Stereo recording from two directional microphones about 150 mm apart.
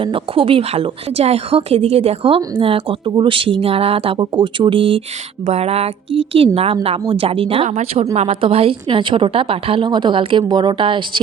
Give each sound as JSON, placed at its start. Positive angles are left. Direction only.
{"t": 0.0, "sound": "speech", "side_deg": -35}